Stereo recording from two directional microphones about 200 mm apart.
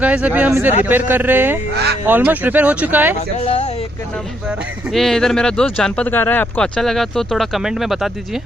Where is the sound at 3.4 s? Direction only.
30° left (ahead or behind).